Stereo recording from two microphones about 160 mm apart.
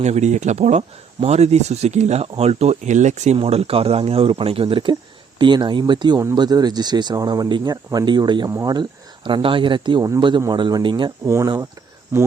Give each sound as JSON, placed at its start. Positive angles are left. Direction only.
{"t": 0.0, "sound": "speech", "side_deg": -45}
{"t": 3.3, "sound": "speech", "side_deg": -35}